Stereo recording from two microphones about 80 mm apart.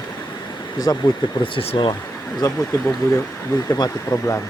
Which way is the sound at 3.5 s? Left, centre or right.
Left.